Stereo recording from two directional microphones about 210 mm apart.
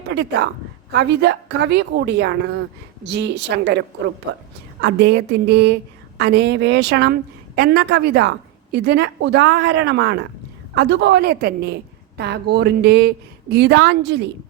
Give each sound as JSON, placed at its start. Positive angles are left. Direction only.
{"t": 0.1, "sound": "a woman's voice", "side_deg": -55}